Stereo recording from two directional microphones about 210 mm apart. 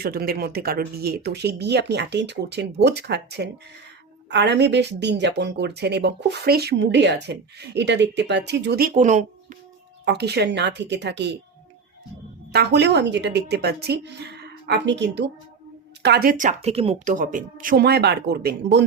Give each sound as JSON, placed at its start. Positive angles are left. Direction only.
{"t": 0.0, "sound": "speech", "side_deg": -45}
{"t": 10.1, "sound": "a woman's voice", "side_deg": -50}
{"t": 12.5, "sound": "speech", "side_deg": -55}